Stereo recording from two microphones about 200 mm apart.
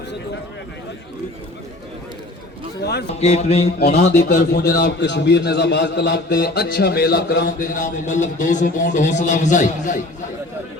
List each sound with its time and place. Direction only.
3.1 s speech: 30° left (ahead or behind)
3.8 s a man's voice: 55° left (ahead or behind)